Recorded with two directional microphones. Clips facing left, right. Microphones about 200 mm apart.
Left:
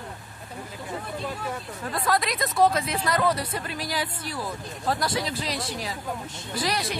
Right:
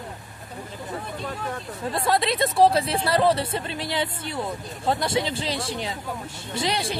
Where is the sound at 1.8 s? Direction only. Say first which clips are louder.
Right 3 dB; 25° right (ahead or behind).